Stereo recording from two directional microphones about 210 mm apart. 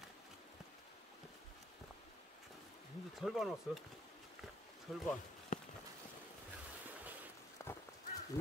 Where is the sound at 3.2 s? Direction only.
Centre (ahead or behind).